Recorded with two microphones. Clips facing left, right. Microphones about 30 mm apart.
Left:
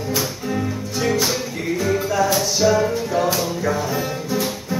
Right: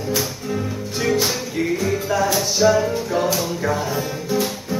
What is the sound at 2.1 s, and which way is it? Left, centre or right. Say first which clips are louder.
Music: left 1 dB; centre.